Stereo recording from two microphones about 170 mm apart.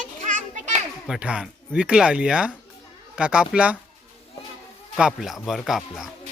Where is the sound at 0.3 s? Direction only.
45° right (ahead or behind).